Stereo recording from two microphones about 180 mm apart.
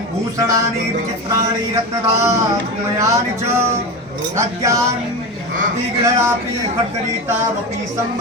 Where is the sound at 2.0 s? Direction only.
15° right (ahead or behind).